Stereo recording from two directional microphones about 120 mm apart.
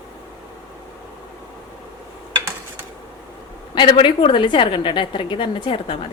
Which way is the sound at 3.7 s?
45° left (ahead or behind).